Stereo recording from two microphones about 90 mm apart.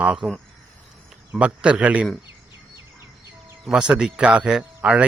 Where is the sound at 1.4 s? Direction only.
15° right (ahead or behind).